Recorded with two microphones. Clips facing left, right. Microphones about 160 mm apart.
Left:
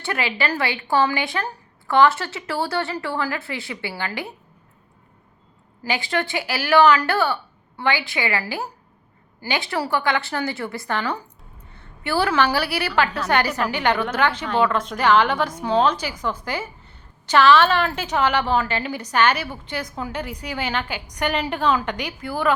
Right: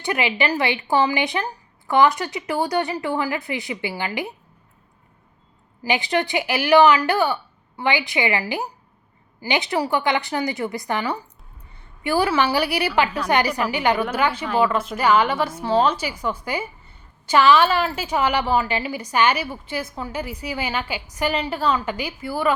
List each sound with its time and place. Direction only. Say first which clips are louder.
0.0 s a woman's voice: right 3 dB; 15° right (ahead or behind)
5.8 s a woman's voice: right 2 dB; 20° right (ahead or behind)